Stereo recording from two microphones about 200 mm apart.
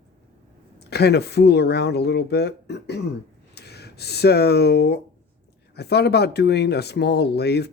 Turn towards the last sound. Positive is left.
turn(degrees=55)  # may be behind; listen again after turning